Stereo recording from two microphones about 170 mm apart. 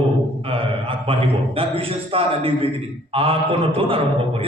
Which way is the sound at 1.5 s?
35° right (ahead or behind).